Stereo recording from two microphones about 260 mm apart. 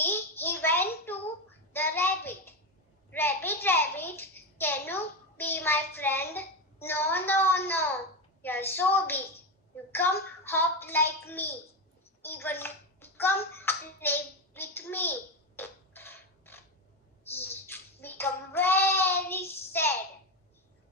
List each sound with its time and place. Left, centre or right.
0.0 s a sound: centre
12.2 s hands: centre
17.3 s child singing: centre